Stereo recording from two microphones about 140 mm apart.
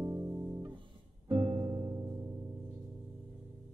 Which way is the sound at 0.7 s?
35° right (ahead or behind).